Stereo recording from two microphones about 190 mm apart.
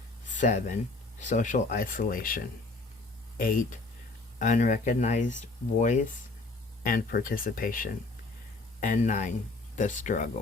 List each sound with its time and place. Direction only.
0.3 s speech: 40° left (ahead or behind)